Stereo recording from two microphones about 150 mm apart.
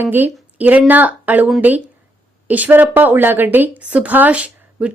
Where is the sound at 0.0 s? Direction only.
15° right (ahead or behind).